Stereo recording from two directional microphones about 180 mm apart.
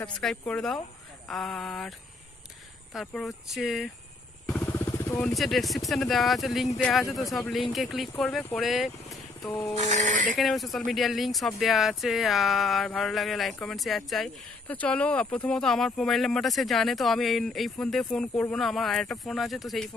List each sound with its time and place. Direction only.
0.0 s speech: 5° left (ahead or behind)
4.5 s vehicle: 10° left (ahead or behind)
5.3 s speech: centre (ahead or behind)
9.8 s speech: 40° right (ahead or behind)
10.4 s speech: centre (ahead or behind)